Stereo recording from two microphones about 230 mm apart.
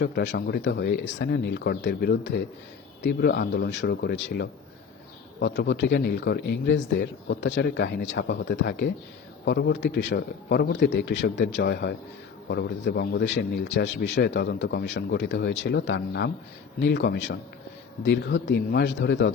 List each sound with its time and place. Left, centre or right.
0.0 s speech: left